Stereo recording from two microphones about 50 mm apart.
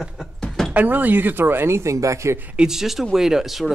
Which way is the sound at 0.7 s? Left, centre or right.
Right.